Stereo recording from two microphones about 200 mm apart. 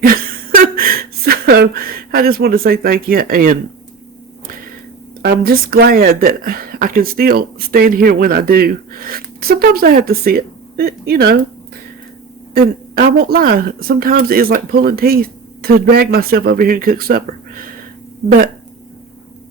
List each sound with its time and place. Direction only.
0.0 s speech: 45° right (ahead or behind)
5.2 s speech: 50° right (ahead or behind)
12.5 s speech: 50° right (ahead or behind)